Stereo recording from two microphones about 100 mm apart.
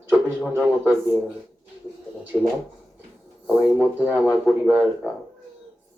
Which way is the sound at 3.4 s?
10° right (ahead or behind).